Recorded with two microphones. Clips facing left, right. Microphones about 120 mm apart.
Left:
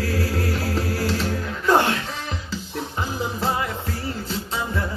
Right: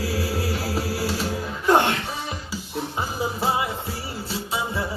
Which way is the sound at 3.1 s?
10° right (ahead or behind).